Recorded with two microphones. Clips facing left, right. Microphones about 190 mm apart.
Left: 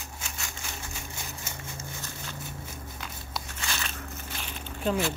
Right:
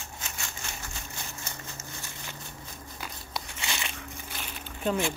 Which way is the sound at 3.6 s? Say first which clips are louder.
Left 1 dB; 15° right (ahead or behind).